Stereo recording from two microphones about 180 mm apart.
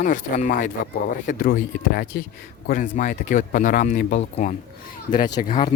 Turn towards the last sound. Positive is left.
turn(degrees=50)  # may be behind; listen again after turning